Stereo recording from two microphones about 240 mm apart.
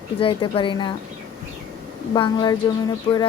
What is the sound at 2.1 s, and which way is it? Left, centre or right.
Speech, centre.